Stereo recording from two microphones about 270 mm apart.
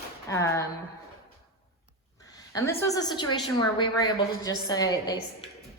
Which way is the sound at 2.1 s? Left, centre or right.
Centre.